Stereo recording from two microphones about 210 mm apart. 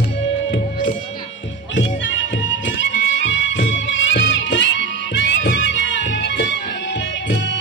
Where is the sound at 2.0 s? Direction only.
60° left (ahead or behind).